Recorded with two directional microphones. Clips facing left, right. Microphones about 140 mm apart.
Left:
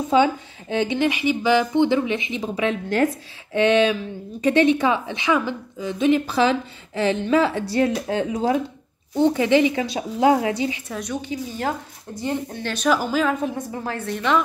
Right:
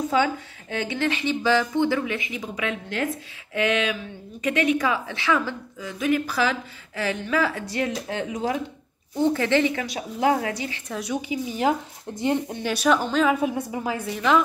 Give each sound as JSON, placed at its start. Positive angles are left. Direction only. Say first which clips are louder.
{"t": 0.1, "sound": "a woman's voice", "louder": "left 9 dB", "side_deg": 20}
{"t": 9.1, "sound": "a woman's voice", "louder": "left 4 dB", "side_deg": 20}
{"t": 10.9, "sound": "a woman's voice", "louder": "even", "side_deg": -5}
{"t": 12.9, "sound": "a woman's voice", "louder": "left 1 dB", "side_deg": 5}
{"t": 13.3, "sound": "a woman's voice", "louder": "right 1 dB", "side_deg": -10}